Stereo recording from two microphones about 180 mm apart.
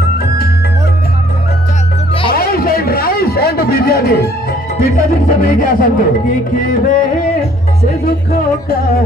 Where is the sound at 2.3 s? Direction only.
55° left (ahead or behind).